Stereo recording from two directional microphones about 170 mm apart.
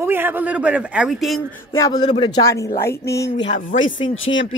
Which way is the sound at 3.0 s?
75° left (ahead or behind).